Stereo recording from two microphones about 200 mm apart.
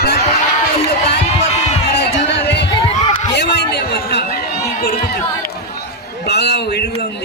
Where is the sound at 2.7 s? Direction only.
25° left (ahead or behind).